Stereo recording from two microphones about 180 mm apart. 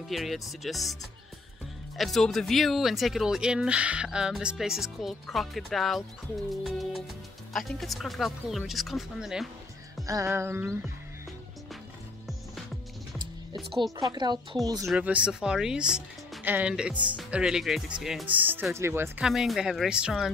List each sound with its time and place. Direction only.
0.1 s speech: centre (ahead or behind)
2.0 s speech: centre (ahead or behind)
10.0 s speech: 15° right (ahead or behind)
14.1 s speech: 25° right (ahead or behind)
14.9 s speech: 5° right (ahead or behind)
19.2 s speech: centre (ahead or behind)